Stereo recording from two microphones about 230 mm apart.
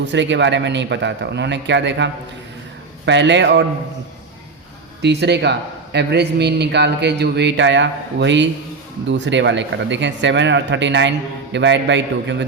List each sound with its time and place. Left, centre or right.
0.0 s a man's voice: right
3.1 s a man's voice: right
5.0 s a man's voice: right